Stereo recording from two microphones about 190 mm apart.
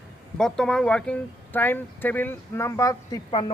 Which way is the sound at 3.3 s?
25° left (ahead or behind).